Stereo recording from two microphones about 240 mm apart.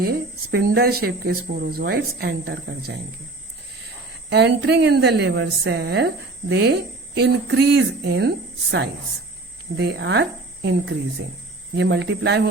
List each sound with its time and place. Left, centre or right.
0.0 s speech: right
4.3 s a woman's voice: right